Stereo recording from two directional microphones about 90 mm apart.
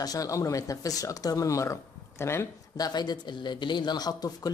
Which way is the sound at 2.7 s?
50° left (ahead or behind).